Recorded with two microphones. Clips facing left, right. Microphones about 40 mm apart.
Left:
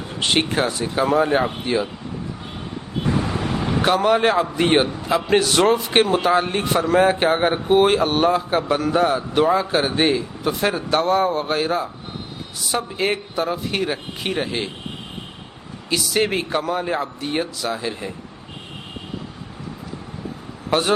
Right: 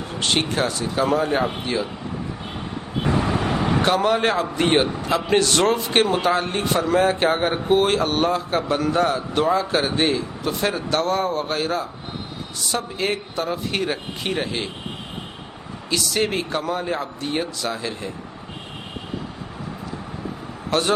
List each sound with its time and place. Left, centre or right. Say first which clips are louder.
0.2 s a man's voice: left 2 dB; centre
3.1 s vehicle: right 1 dB; right
3.8 s a man's voice: left 3 dB; centre
15.9 s a man's voice: left 2 dB; centre
20.7 s a man's voice: left 1 dB; centre